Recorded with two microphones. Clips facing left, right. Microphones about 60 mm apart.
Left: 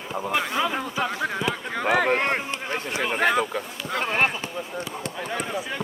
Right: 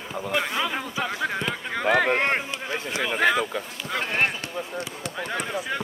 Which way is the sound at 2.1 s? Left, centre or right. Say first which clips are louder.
Even; right.